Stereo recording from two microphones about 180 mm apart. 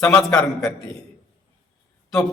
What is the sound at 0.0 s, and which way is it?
Speech, 5° left (ahead or behind).